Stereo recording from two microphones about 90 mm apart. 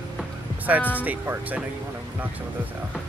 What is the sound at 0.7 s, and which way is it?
Speech, 15° right (ahead or behind).